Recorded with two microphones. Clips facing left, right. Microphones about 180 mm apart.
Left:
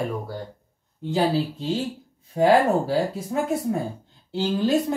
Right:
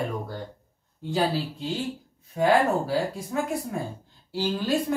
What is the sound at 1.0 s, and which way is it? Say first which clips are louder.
Speech: left 4 dB; 20° left (ahead or behind).